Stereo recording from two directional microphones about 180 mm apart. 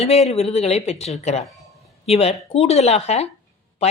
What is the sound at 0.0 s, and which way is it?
A woman's voice, 35° left (ahead or behind).